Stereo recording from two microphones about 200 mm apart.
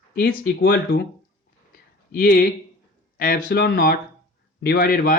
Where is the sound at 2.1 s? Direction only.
45° left (ahead or behind).